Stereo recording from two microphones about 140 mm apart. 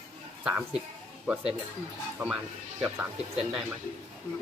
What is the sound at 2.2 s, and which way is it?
Speech, 15° right (ahead or behind).